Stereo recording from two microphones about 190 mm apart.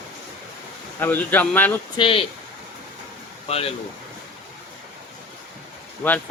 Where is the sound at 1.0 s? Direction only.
10° left (ahead or behind).